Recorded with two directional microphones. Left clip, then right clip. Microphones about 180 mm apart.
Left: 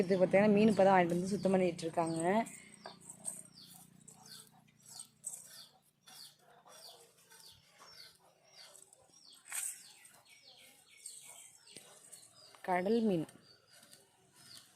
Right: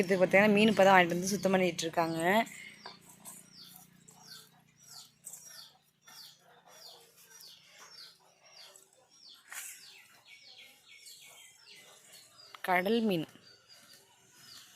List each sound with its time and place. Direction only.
0.0 s speech: centre (ahead or behind)
12.5 s speech: centre (ahead or behind)